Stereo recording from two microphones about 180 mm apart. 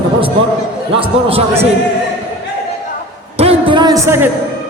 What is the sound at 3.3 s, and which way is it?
Music, 35° right (ahead or behind).